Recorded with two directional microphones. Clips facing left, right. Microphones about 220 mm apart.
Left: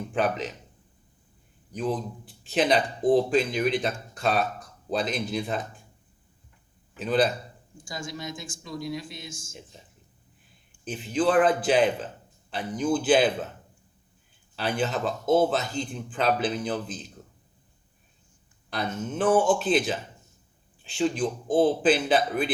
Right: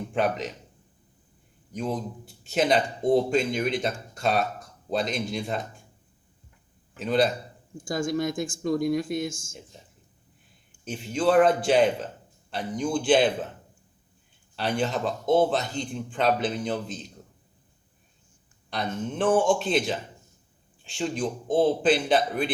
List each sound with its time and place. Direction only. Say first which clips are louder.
0.1 s speech: even; centre (ahead or behind)
1.7 s speech: left 1 dB; centre (ahead or behind)
6.9 s speech: even; centre (ahead or behind)
7.9 s speech: right 10 dB; 50° right (ahead or behind)
10.8 s speech: even; centre (ahead or behind)
14.5 s speech: right 1 dB; centre (ahead or behind)
18.7 s speech: even; 5° left (ahead or behind)